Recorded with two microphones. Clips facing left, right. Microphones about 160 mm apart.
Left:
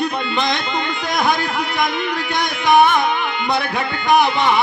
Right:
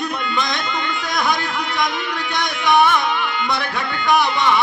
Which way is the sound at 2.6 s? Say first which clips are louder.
Left 2 dB; 50° left (ahead or behind).